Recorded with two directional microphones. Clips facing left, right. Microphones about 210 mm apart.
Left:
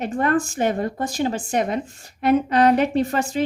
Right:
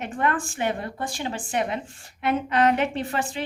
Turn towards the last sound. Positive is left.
turn(degrees=40)  # may be behind; listen again after turning